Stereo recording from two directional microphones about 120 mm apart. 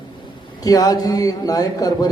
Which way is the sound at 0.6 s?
30° left (ahead or behind).